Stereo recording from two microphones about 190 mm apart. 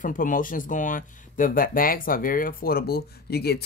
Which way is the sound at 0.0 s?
45° left (ahead or behind).